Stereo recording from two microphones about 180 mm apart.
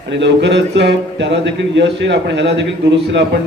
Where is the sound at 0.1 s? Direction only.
80° right.